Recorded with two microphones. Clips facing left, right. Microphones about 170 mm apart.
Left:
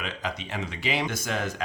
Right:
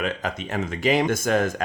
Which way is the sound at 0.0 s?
50° right (ahead or behind).